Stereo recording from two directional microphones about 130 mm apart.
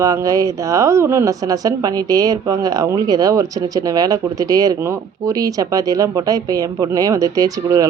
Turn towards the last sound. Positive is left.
turn(degrees=-25)  # may be behind; listen again after turning